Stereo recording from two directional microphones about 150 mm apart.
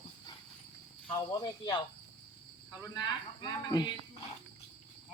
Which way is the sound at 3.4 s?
25° left (ahead or behind).